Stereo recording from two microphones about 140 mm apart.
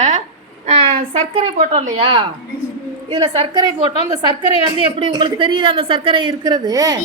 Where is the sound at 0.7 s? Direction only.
45° right (ahead or behind).